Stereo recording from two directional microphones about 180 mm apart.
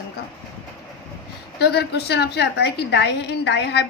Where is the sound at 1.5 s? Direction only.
65° left (ahead or behind).